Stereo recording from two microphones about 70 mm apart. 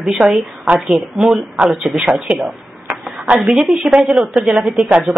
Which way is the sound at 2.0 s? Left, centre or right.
Right.